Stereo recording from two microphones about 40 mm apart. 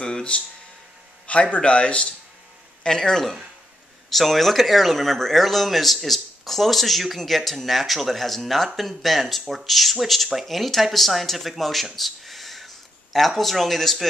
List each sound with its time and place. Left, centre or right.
0.0 s a sound: left
1.5 s a man's voice: left
2.8 s speech: centre